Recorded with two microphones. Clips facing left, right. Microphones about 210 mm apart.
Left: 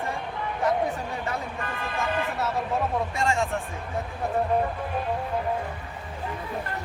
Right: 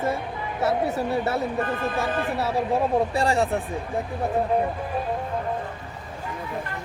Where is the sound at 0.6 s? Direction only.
40° right (ahead or behind).